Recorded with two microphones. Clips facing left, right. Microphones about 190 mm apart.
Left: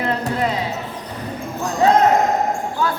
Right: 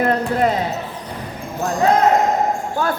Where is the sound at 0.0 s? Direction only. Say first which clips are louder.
Right 4 dB; 50° right (ahead or behind).